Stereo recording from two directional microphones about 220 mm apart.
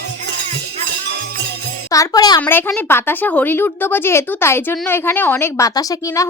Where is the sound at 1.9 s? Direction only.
15° left (ahead or behind).